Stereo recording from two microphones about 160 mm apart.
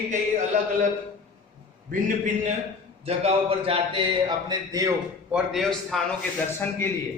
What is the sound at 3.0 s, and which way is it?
Speech, 40° right (ahead or behind).